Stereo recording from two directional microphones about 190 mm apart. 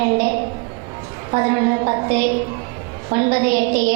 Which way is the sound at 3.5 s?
50° right (ahead or behind).